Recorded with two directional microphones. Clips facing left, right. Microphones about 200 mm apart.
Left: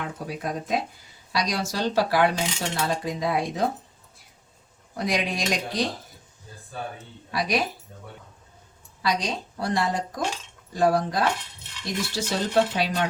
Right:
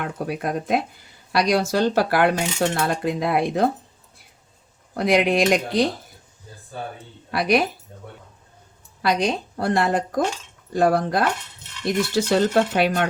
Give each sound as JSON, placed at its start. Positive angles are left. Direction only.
{"t": 0.0, "sound": "speech", "side_deg": -60}
{"t": 4.9, "sound": "speech", "side_deg": -60}
{"t": 7.3, "sound": "speech", "side_deg": -60}
{"t": 9.0, "sound": "speech", "side_deg": -55}